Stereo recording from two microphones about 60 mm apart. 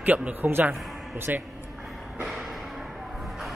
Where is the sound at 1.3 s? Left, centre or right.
Right.